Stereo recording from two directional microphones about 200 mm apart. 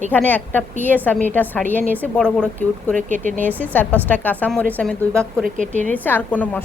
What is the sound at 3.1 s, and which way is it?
Speech, 40° right (ahead or behind).